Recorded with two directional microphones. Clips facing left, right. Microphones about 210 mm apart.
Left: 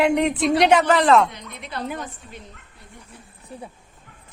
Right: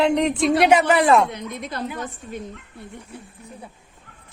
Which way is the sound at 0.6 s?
10° right (ahead or behind).